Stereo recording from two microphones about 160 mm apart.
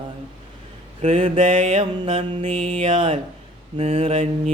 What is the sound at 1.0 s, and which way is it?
Mantra, 35° right (ahead or behind).